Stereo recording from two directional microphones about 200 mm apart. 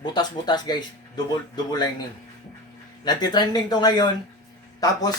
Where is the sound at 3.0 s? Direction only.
20° left (ahead or behind).